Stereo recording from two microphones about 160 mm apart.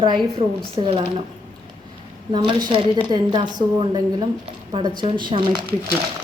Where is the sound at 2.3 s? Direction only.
25° right (ahead or behind).